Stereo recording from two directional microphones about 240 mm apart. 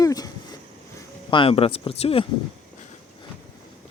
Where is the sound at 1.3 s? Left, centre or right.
Left.